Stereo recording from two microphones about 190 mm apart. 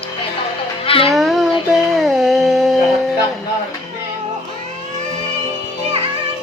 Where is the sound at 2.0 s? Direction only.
Centre (ahead or behind).